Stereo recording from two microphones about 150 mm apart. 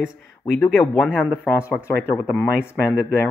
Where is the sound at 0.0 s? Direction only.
5° left (ahead or behind).